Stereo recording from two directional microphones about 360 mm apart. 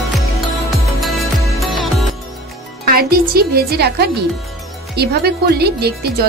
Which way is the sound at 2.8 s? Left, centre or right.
Right.